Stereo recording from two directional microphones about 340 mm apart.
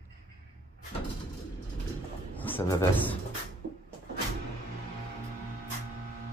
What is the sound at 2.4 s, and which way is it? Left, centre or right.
Speech, centre.